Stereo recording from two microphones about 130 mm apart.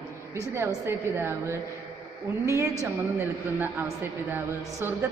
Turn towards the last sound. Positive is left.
turn(degrees=-20)  # may be behind; listen again after turning